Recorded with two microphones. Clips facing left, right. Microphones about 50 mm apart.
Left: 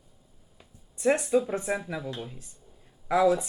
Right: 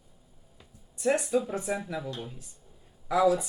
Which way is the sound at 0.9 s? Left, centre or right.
Left.